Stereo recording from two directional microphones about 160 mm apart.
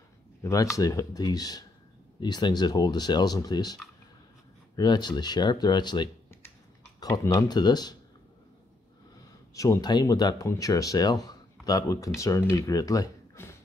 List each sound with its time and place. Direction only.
0.4 s speech: 20° left (ahead or behind)
9.5 s speech: 20° left (ahead or behind)